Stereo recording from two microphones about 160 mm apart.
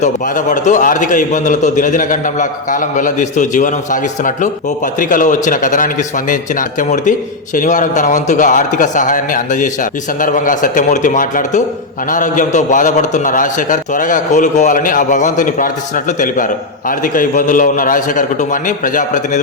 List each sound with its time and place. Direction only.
0.0 s a man's voice: 50° left (ahead or behind)
4.9 s a man's voice: 55° left (ahead or behind)